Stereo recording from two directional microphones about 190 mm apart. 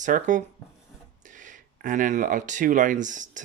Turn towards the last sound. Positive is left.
turn(degrees=-40)  # may be behind; listen again after turning